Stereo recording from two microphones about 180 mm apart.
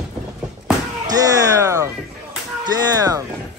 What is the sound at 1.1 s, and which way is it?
Speech, 20° right (ahead or behind).